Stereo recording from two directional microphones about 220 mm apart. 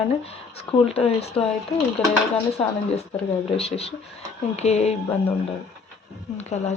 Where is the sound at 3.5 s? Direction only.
25° left (ahead or behind).